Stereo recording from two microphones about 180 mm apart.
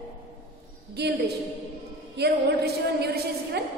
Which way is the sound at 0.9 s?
65° right (ahead or behind).